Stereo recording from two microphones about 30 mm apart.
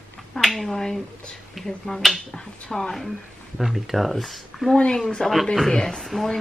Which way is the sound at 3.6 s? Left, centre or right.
Centre.